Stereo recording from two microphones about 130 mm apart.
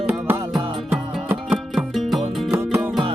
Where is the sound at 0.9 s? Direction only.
15° right (ahead or behind).